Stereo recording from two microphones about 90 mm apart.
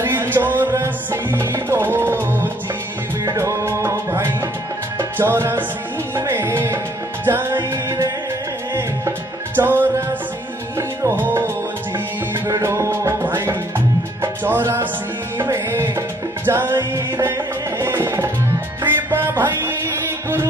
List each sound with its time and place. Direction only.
0.0 s music: 25° right (ahead or behind)
3.3 s music: 35° right (ahead or behind)
9.6 s music: 25° right (ahead or behind)
11.1 s music: 25° right (ahead or behind)